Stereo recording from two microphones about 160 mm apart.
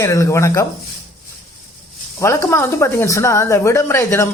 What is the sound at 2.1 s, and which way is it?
A man's voice, 20° left (ahead or behind).